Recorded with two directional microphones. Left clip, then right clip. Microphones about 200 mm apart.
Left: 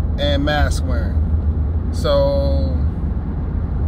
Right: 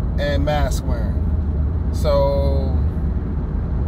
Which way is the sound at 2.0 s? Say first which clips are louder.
Left 2 dB; 15° left (ahead or behind).